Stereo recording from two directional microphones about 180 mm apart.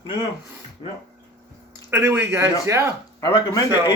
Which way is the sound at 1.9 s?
10° right (ahead or behind).